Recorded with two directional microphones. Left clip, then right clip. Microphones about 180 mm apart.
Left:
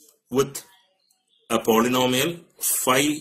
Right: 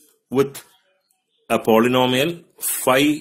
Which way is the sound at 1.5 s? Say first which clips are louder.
Right 4 dB; 45° right (ahead or behind).